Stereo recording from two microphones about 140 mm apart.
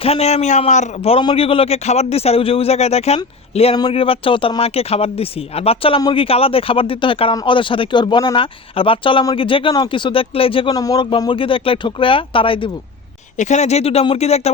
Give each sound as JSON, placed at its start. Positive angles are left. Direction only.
{"t": 0.0, "sound": "speech", "side_deg": 45}
{"t": 1.2, "sound": "speech", "side_deg": 40}
{"t": 10.8, "sound": "speech", "side_deg": 30}
{"t": 13.3, "sound": "speech", "side_deg": 55}